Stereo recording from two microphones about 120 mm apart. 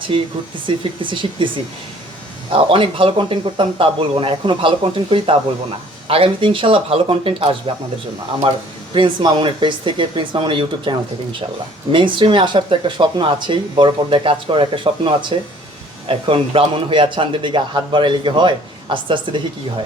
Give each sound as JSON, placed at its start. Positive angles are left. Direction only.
{"t": 0.1, "sound": "speech", "side_deg": -45}
{"t": 8.9, "sound": "speech", "side_deg": -45}